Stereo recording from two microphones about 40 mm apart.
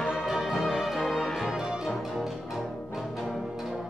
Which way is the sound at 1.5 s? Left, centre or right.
Right.